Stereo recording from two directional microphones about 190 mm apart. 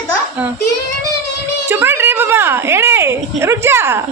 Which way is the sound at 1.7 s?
10° right (ahead or behind).